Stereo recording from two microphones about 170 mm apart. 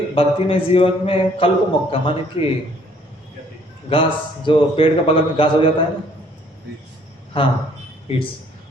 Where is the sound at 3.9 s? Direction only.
30° left (ahead or behind).